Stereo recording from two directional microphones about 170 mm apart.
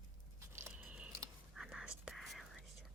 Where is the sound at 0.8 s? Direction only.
5° right (ahead or behind).